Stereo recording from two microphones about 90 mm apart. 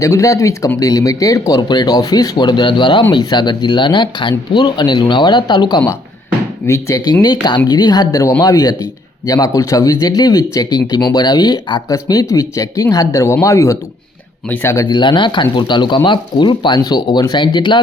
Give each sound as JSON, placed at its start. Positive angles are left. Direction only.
{"t": 0.0, "sound": "speech", "side_deg": 35}
{"t": 1.6, "sound": "speech", "side_deg": 50}
{"t": 6.7, "sound": "speech", "side_deg": 35}
{"t": 7.0, "sound": "speech", "side_deg": 50}
{"t": 14.5, "sound": "speech", "side_deg": 25}
{"t": 14.8, "sound": "speech", "side_deg": 60}